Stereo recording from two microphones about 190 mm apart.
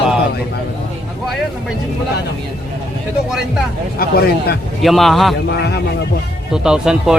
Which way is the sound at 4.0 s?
55° left (ahead or behind).